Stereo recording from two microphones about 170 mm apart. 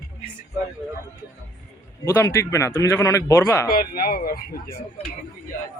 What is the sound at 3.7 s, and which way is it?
Speech, 60° left (ahead or behind).